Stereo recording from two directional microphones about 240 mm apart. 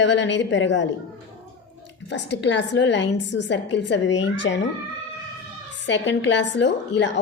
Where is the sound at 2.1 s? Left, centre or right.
Left.